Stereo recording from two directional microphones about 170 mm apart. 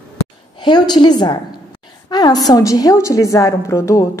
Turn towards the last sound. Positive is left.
turn(degrees=20)  # may be behind; listen again after turning